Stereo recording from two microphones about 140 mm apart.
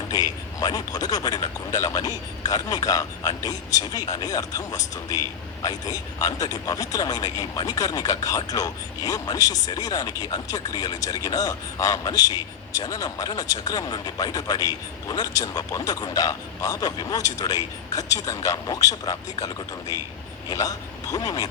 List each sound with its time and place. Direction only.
0.1 s a man's voice: 30° left (ahead or behind)
20.5 s a man's voice: 25° left (ahead or behind)